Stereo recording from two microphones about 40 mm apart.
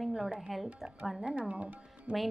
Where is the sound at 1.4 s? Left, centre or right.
Right.